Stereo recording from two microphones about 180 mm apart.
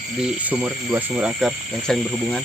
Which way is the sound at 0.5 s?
10° right (ahead or behind).